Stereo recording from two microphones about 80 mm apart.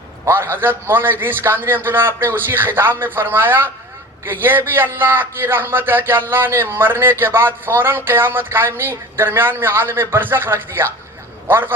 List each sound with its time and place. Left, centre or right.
0.3 s a man's voice: right